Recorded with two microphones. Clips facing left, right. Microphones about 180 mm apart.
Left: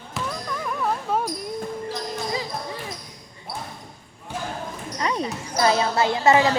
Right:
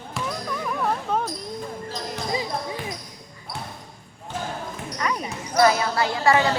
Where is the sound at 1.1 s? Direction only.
5° left (ahead or behind).